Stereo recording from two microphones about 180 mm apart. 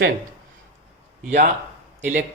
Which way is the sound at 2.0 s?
40° right (ahead or behind).